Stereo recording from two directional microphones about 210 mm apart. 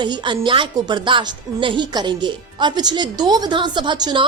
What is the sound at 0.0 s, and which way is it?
A woman's voice, 20° right (ahead or behind).